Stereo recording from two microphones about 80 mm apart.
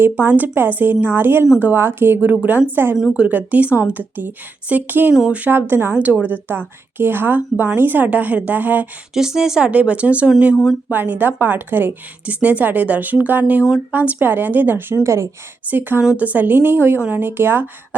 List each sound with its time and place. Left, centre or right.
0.0 s a woman's voice: right
9.1 s speech: centre
10.6 s speech: centre
10.9 s a woman's voice: right
15.7 s a woman's voice: right